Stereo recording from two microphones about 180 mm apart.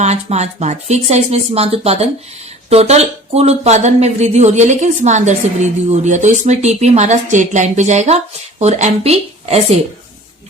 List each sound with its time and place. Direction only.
0.0 s speech: 40° right (ahead or behind)